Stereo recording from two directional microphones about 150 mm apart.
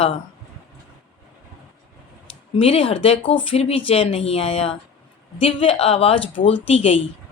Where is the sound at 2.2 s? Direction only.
40° left (ahead or behind).